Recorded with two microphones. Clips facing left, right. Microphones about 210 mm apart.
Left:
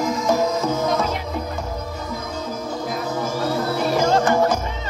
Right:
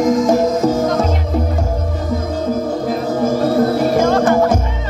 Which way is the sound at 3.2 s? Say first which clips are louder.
Right 11 dB; 55° right (ahead or behind).